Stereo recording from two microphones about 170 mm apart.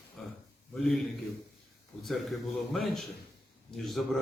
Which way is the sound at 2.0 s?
Centre (ahead or behind).